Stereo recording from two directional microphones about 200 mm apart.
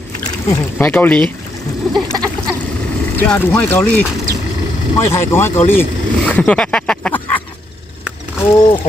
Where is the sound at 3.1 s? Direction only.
10° left (ahead or behind).